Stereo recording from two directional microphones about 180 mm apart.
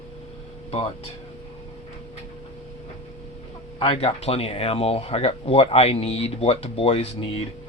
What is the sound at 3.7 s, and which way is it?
Speech, 30° left (ahead or behind).